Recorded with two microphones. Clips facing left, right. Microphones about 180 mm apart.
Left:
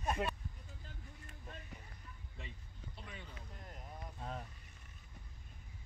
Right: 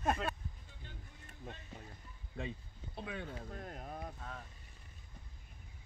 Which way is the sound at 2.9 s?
60° right (ahead or behind).